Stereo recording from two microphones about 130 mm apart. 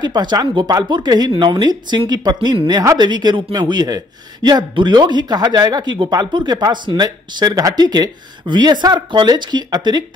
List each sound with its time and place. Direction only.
0.0 s speech: 35° right (ahead or behind)